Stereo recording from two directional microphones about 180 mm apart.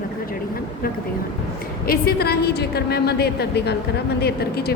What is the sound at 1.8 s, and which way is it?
Speech, 55° left (ahead or behind).